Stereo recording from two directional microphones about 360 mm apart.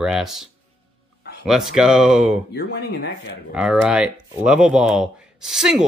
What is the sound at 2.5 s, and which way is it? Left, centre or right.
Speech, left.